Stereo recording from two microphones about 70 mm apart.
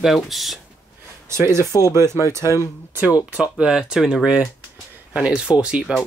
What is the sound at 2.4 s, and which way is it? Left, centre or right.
Speech, left.